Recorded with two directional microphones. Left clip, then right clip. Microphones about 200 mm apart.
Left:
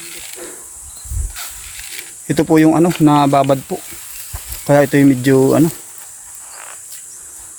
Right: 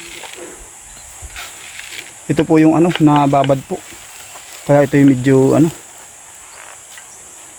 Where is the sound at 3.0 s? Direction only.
20° left (ahead or behind).